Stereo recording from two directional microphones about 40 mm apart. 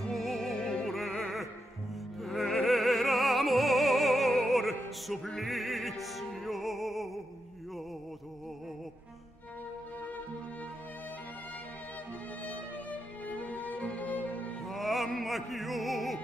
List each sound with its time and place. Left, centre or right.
0.1 s music: centre
0.6 s music: left
0.9 s music: centre
2.2 s opera: centre
5.4 s music: centre
13.3 s music: left
14.6 s music: centre